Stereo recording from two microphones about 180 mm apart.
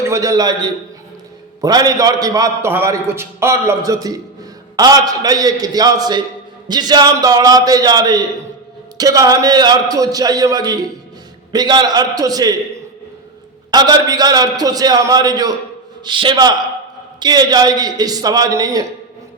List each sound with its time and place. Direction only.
0.0 s a man's voice: 20° right (ahead or behind)
13.7 s a man's voice: 20° right (ahead or behind)